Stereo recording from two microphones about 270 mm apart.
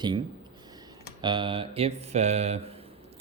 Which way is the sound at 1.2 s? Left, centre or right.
Centre.